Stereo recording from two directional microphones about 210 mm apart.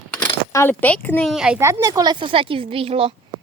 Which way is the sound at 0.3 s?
15° left (ahead or behind).